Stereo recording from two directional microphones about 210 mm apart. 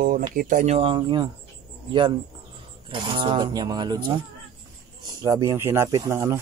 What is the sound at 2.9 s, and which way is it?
Speech, 25° right (ahead or behind).